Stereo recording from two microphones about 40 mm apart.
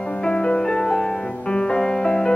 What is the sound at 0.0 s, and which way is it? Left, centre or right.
Music, left.